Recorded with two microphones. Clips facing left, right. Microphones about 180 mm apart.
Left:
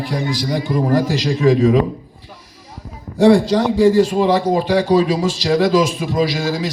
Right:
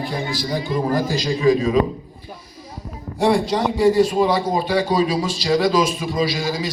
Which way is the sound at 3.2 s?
90° left.